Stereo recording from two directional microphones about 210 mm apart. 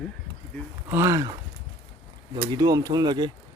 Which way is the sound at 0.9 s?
15° right (ahead or behind).